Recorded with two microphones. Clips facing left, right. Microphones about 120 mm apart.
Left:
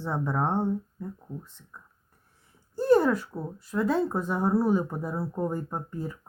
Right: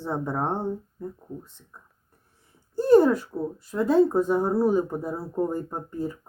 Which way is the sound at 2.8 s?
25° right (ahead or behind).